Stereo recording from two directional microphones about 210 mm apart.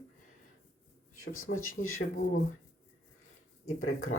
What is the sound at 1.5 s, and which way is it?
Speech, 75° left (ahead or behind).